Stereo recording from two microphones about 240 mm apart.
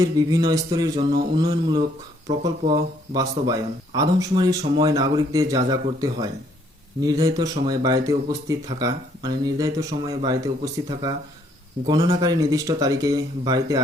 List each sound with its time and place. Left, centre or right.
0.0 s speech: centre